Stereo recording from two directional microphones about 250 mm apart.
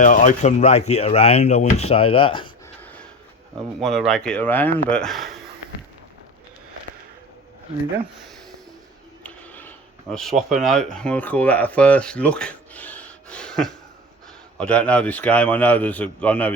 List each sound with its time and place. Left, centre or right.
0.0 s speech: left
3.8 s a man's voice: centre
9.2 s a sound: centre
10.9 s a man's voice: centre